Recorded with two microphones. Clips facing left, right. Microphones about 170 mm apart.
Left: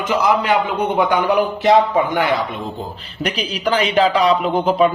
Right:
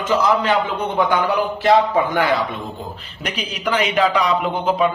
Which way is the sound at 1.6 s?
20° left (ahead or behind).